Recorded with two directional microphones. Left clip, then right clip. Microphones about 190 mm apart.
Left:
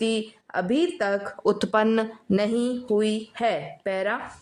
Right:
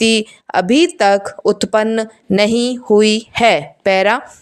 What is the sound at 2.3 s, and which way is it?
A woman's voice, 30° right (ahead or behind).